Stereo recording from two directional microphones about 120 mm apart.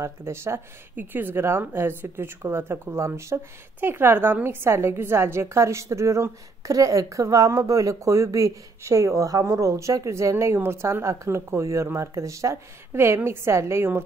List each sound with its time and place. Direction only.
0.0 s a woman's voice: 20° right (ahead or behind)